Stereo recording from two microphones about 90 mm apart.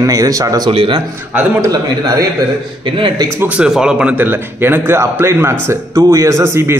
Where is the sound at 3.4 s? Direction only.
15° right (ahead or behind).